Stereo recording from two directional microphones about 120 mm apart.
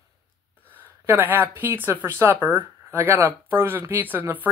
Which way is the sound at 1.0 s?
15° right (ahead or behind).